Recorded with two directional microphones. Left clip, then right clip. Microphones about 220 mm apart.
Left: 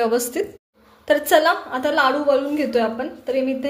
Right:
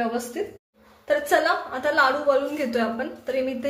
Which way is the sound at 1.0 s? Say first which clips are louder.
Left 5 dB; 35° left (ahead or behind).